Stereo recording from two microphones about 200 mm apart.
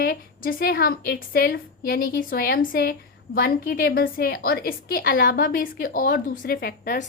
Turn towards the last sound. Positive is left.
turn(degrees=45)  # may be behind; listen again after turning